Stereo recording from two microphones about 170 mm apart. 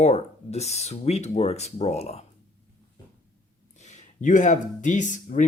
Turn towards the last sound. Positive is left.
turn(degrees=50)  # may be behind; listen again after turning